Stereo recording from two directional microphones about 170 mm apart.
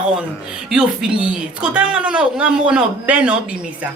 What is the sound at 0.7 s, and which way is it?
A woman's voice, 5° right (ahead or behind).